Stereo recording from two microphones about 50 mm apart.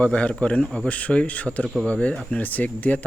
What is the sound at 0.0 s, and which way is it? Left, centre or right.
Speech, left.